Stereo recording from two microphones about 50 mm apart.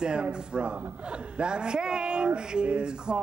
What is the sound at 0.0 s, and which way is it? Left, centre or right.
Speech, right.